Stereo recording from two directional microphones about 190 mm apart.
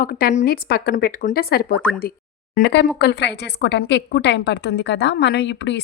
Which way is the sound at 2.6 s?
65° left (ahead or behind).